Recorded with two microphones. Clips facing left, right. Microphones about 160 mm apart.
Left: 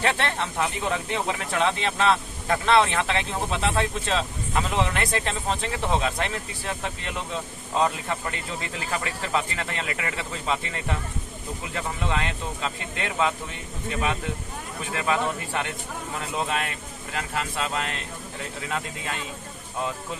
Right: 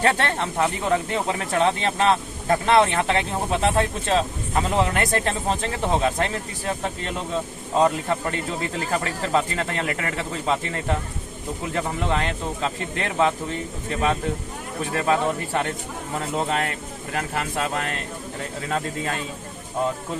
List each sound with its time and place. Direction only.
0.0 s speech: 40° right (ahead or behind)
17.2 s speech: 50° right (ahead or behind)